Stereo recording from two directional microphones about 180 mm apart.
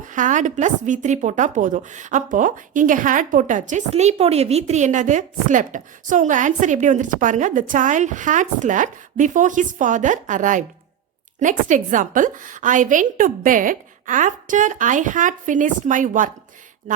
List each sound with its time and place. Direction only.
0.0 s a woman's voice: 45° right (ahead or behind)